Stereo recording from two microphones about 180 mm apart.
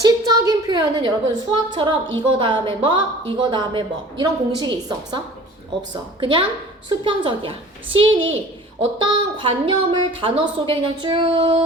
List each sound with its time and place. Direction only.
0.0 s a woman's voice: 20° right (ahead or behind)